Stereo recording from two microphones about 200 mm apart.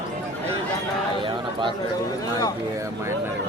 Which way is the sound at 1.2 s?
25° right (ahead or behind).